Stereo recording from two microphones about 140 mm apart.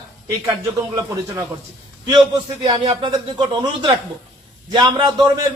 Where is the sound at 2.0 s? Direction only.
30° right (ahead or behind).